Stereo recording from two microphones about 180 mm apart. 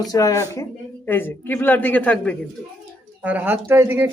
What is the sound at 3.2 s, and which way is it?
Speech, 10° right (ahead or behind).